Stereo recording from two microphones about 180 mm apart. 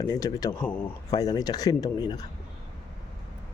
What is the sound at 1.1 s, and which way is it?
A man's voice, 20° left (ahead or behind).